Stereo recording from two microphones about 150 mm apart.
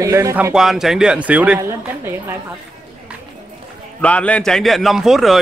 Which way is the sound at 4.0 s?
10° left (ahead or behind).